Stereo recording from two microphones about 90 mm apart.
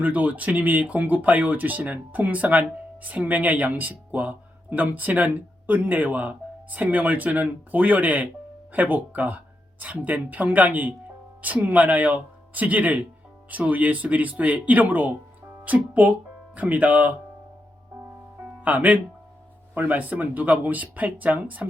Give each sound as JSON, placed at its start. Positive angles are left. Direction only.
{"t": 0.0, "sound": "speech", "side_deg": -15}
{"t": 18.6, "sound": "speech", "side_deg": -20}